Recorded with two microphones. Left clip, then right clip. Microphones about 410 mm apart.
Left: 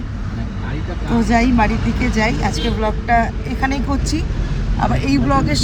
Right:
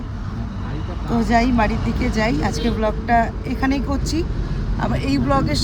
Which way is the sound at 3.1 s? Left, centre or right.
Centre.